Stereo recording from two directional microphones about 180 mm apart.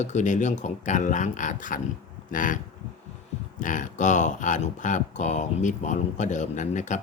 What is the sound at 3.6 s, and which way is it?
Speech, 45° left (ahead or behind).